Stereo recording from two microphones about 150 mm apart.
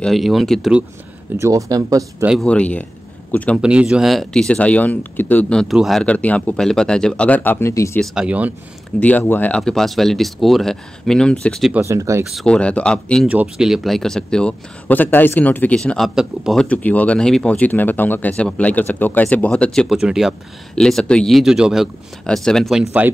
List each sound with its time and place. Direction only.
0.0 s speech: centre (ahead or behind)
1.4 s speech: 25° right (ahead or behind)
2.4 s speech: 10° left (ahead or behind)
3.6 s speech: 5° right (ahead or behind); by 8.0 s 20° left (ahead or behind)
8.0 s speech: 5° right (ahead or behind)
9.0 s speech: 10° left (ahead or behind)
9.6 s speech: centre (ahead or behind)
11.7 s speech: 20° right (ahead or behind)
12.3 s speech: 5° left (ahead or behind)
13.3 s speech: 5° right (ahead or behind)
16.6 s speech: 10° left (ahead or behind); by 23.1 s 5° right (ahead or behind)